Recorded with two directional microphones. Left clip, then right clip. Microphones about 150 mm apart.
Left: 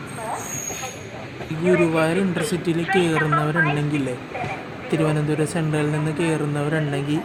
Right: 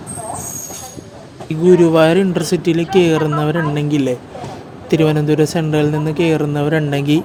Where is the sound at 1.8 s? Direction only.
50° right (ahead or behind).